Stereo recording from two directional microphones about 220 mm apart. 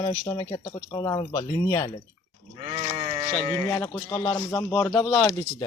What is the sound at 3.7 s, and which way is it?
Speech, 10° left (ahead or behind).